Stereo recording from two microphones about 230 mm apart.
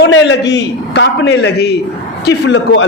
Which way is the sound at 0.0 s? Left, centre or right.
Left.